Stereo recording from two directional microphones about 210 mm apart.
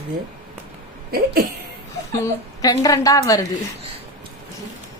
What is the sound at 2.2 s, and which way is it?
A woman's voice, 15° left (ahead or behind).